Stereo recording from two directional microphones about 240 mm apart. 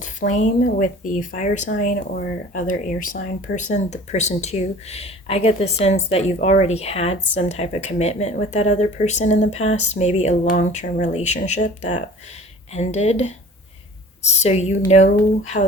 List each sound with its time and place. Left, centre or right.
0.0 s speech: left